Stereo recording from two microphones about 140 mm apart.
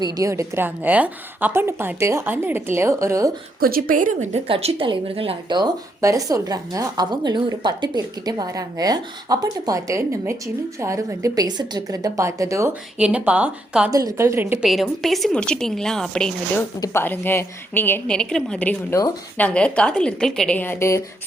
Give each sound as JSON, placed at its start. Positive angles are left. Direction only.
{"t": 0.0, "sound": "a woman's voice", "side_deg": -25}
{"t": 3.6, "sound": "a woman's voice", "side_deg": -90}
{"t": 4.4, "sound": "speech", "side_deg": -40}
{"t": 13.0, "sound": "a woman's voice", "side_deg": -10}
{"t": 13.9, "sound": "speech", "side_deg": -20}
{"t": 14.6, "sound": "a woman's voice", "side_deg": 0}
{"t": 16.8, "sound": "a woman's voice", "side_deg": 15}